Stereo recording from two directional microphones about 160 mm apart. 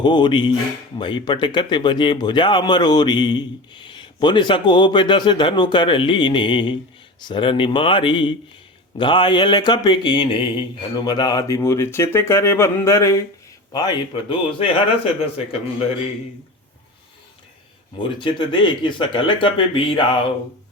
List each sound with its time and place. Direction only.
0.0 s speech: 30° left (ahead or behind)
18.0 s speech: 30° left (ahead or behind)